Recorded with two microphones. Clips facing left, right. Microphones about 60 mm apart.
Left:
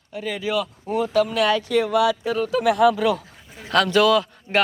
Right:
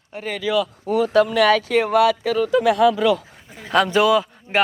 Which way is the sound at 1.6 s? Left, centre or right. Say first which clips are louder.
Right 3 dB; right.